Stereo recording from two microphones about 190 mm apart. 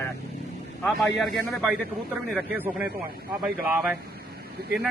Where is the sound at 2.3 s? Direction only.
10° right (ahead or behind).